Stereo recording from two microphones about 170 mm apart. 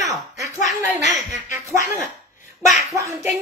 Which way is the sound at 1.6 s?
15° right (ahead or behind).